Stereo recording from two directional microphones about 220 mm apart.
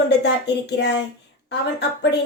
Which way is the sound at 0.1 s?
50° left (ahead or behind).